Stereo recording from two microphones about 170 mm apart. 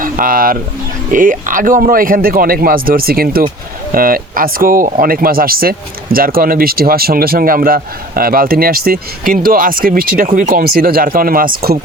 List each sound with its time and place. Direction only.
0.0 s speech: 55° right (ahead or behind)